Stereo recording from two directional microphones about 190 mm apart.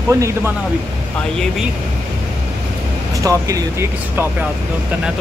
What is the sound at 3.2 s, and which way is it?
Speech, 15° right (ahead or behind).